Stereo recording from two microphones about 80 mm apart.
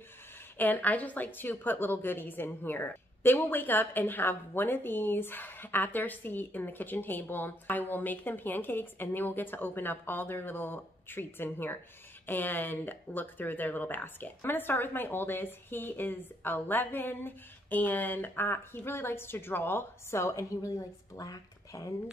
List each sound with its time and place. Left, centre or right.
0.6 s a woman's voice: left